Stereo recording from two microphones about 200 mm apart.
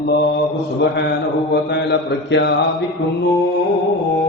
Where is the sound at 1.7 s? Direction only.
60° left (ahead or behind).